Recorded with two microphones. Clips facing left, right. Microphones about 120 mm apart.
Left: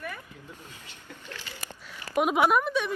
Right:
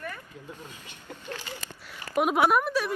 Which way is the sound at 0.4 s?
15° right (ahead or behind).